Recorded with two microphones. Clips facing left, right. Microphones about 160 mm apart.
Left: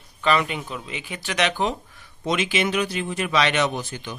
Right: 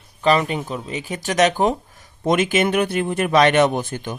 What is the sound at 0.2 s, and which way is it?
Speech, 40° right (ahead or behind).